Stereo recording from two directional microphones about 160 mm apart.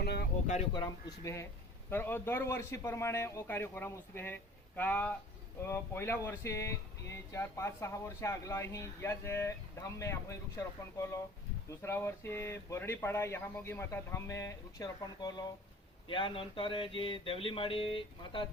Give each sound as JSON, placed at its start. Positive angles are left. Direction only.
{"t": 0.0, "sound": "a sound", "side_deg": 85}
{"t": 0.7, "sound": "speech", "side_deg": 25}
{"t": 16.0, "sound": "music", "side_deg": 30}